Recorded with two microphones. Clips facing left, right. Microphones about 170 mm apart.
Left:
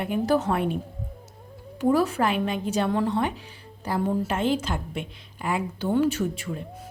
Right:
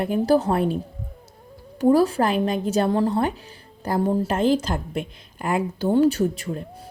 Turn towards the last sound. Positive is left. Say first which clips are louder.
# right 5 dB
turn(degrees=-40)  # may be behind; listen again after turning